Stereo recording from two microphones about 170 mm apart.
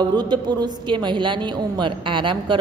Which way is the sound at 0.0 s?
25° right (ahead or behind).